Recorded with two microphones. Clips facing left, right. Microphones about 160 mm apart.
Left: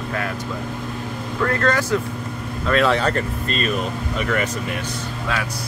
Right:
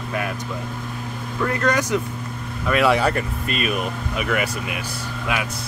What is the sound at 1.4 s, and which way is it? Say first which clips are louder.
Speech: left 1 dB; 15° right (ahead or behind).